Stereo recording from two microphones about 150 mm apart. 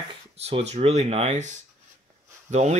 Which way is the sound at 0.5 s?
45° right (ahead or behind).